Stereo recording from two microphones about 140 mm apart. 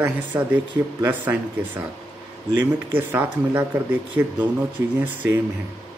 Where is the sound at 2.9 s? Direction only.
15° right (ahead or behind).